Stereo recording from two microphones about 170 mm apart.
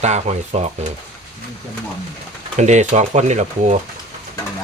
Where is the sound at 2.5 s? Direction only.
45° right (ahead or behind).